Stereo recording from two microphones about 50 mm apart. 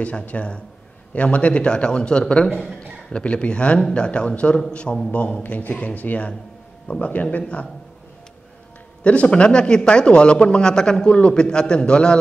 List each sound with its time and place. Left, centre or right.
0.0 s a man's voice: left
5.4 s speech: left
9.0 s speech: left